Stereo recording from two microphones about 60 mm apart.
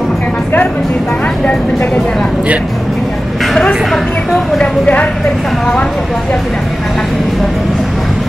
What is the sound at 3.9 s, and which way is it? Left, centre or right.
Speech, centre.